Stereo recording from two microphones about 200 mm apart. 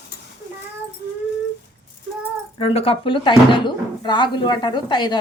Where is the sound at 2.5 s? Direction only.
30° left (ahead or behind).